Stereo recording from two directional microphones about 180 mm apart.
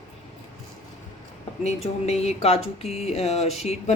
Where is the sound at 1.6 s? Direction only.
40° left (ahead or behind).